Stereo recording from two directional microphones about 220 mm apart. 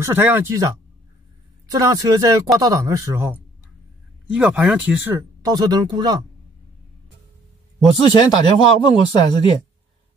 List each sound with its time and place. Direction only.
0.0 s speech: 10° right (ahead or behind)
1.7 s speech: 15° right (ahead or behind)
8.1 s speech: 20° left (ahead or behind)